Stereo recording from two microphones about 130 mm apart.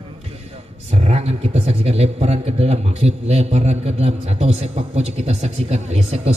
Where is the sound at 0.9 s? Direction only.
60° right (ahead or behind).